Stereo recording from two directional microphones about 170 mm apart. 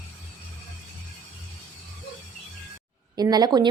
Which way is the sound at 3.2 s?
25° right (ahead or behind).